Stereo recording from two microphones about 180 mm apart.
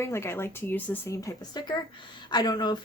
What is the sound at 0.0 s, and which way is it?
Speech, 15° left (ahead or behind).